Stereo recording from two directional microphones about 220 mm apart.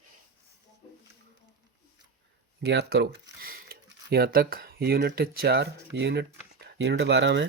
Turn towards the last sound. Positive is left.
turn(degrees=-55)  # may be behind; listen again after turning